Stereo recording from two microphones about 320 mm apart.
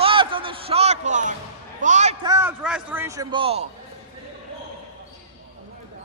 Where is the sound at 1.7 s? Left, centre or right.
Right.